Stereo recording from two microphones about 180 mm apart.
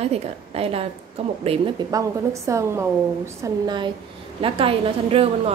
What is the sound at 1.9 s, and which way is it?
A woman's voice, 20° right (ahead or behind).